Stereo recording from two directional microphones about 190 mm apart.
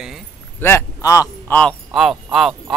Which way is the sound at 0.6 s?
15° left (ahead or behind).